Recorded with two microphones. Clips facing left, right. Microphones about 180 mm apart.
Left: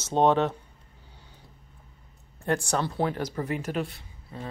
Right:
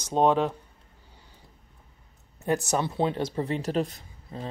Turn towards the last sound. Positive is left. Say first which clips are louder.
# right 2 dB
turn(degrees=-40)  # may be behind; listen again after turning